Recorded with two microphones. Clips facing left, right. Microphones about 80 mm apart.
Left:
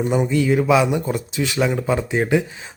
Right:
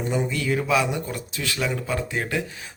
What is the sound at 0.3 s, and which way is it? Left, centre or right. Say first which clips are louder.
Speech: left 7 dB; centre.